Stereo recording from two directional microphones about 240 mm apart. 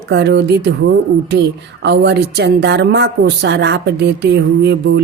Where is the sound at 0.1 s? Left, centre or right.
Right.